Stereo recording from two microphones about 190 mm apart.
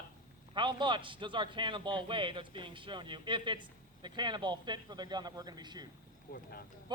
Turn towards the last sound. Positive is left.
turn(degrees=50)  # may be behind; listen again after turning